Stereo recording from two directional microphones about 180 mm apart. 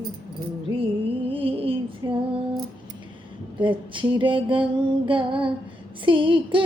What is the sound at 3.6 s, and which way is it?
Female singing, 30° right (ahead or behind).